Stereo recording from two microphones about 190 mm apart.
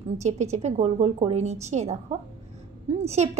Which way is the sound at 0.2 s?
35° right (ahead or behind).